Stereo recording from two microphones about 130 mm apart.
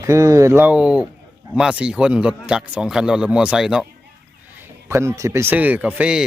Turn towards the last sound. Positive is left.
turn(degrees=-10)  # may be behind; listen again after turning